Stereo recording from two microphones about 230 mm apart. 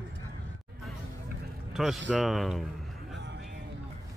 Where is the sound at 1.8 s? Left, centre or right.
Centre.